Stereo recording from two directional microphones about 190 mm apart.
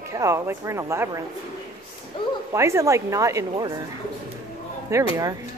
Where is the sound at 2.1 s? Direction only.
25° left (ahead or behind).